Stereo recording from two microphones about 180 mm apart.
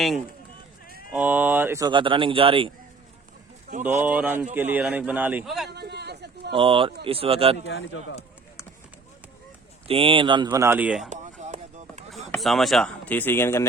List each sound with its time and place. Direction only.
1.1 s a man's voice: 10° right (ahead or behind)
1.9 s speech: 25° right (ahead or behind)
4.0 s a man's voice: 10° right (ahead or behind)
5.6 s a sound: 65° right (ahead or behind)
6.5 s speech: 30° right (ahead or behind)
7.6 s speech: 90° left
9.8 s speech: 30° right (ahead or behind); by 11.1 s 5° right (ahead or behind)
11.1 s a sound: 40° right (ahead or behind)
12.1 s speech: centre (ahead or behind)